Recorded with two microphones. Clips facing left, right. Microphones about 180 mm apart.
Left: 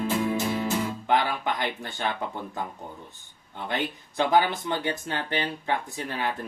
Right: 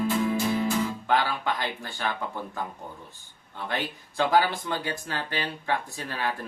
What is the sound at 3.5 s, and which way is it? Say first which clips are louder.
Speech: left 2 dB; 20° left (ahead or behind).